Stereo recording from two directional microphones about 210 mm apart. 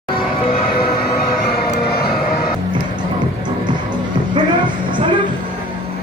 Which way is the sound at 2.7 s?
20° right (ahead or behind).